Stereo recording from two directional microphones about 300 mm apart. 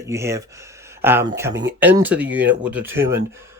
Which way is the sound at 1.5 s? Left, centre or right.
Right.